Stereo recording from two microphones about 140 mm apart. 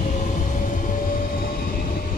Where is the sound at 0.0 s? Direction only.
60° left (ahead or behind).